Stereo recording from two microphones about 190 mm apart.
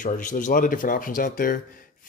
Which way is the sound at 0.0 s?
45° left (ahead or behind).